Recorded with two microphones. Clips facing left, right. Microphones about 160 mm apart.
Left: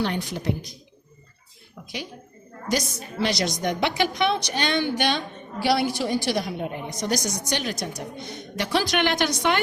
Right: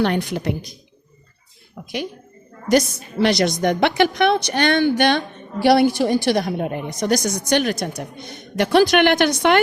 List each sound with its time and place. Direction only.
0.0 s a woman's voice: 60° right (ahead or behind)
2.6 s a woman's voice: 60° right (ahead or behind)